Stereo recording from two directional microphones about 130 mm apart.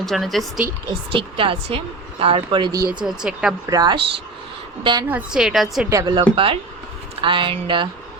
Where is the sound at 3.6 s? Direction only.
30° right (ahead or behind).